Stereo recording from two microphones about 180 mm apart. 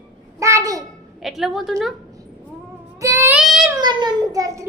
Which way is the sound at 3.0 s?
15° right (ahead or behind).